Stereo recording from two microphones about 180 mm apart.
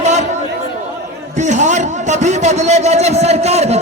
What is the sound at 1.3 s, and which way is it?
Speech, 40° right (ahead or behind).